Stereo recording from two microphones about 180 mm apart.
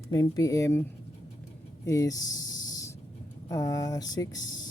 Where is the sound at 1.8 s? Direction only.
20° left (ahead or behind).